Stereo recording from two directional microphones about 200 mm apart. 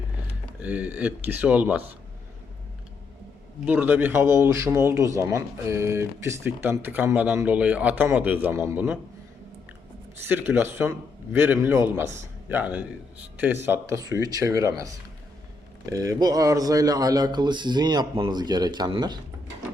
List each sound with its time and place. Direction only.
0.6 s speech: 5° right (ahead or behind)
3.7 s speech: 10° right (ahead or behind)
10.2 s speech: 10° right (ahead or behind)